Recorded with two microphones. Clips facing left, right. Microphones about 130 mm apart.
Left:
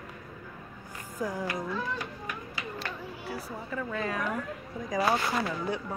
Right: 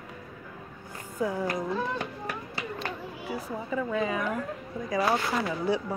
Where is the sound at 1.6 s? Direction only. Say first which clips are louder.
Right 3 dB; 25° right (ahead or behind).